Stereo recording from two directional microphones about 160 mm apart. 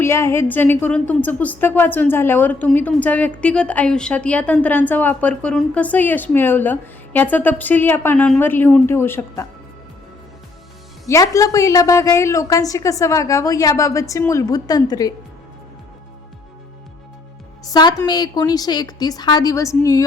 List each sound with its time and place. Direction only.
0.0 s a woman's voice: 15° left (ahead or behind)
11.0 s a woman's voice: 20° left (ahead or behind)
17.7 s a woman's voice: 25° left (ahead or behind)